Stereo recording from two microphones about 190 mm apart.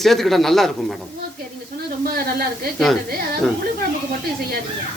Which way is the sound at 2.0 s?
50° right (ahead or behind).